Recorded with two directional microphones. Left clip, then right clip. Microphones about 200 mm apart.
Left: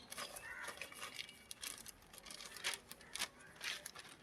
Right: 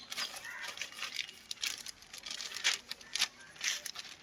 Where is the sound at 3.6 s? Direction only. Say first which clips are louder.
Right 9 dB; 5° right (ahead or behind).